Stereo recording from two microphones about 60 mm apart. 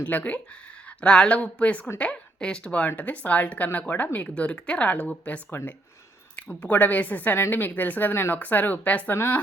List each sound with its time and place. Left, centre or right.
0.0 s a woman's voice: left
6.6 s a woman's voice: left